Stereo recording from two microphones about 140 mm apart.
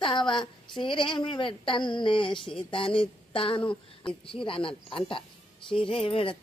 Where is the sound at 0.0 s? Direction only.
35° left (ahead or behind).